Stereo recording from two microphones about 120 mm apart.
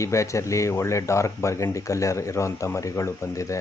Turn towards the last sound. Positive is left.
turn(degrees=25)  # may be behind; listen again after turning